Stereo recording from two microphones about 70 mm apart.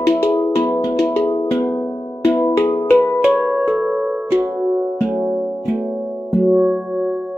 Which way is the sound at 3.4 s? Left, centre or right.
Centre.